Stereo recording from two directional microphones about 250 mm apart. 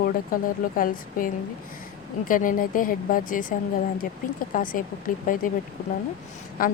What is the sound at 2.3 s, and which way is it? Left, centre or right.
Speech, left.